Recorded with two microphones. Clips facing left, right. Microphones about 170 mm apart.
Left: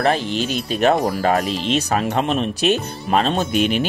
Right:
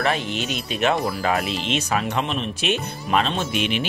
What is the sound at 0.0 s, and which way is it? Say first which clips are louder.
Speech: left 4 dB; 35° left (ahead or behind).